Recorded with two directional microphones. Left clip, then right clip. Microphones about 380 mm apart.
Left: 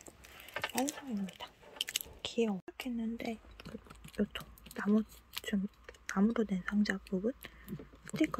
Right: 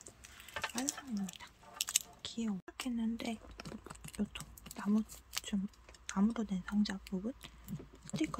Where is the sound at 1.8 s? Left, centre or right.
Centre.